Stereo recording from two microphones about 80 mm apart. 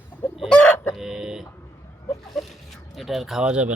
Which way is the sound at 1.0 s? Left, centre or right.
Centre.